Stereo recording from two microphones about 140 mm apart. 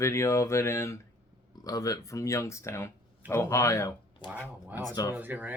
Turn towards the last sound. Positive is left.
turn(degrees=-10)  # may be behind; listen again after turning